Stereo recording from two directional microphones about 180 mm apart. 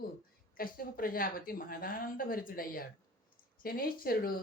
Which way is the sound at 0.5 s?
55° left (ahead or behind).